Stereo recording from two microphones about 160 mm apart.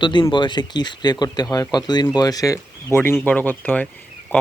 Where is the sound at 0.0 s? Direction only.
30° left (ahead or behind).